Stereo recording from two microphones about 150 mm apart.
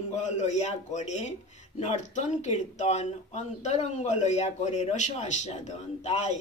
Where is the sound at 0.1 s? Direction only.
50° left (ahead or behind).